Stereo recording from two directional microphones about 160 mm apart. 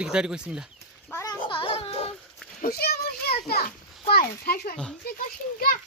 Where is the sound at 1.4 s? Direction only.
30° left (ahead or behind).